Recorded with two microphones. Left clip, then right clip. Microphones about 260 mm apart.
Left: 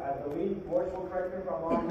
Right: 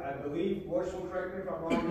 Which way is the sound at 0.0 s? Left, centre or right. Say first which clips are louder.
Left 2 dB; right.